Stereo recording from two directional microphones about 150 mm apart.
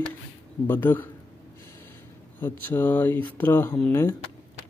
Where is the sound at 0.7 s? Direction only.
15° left (ahead or behind).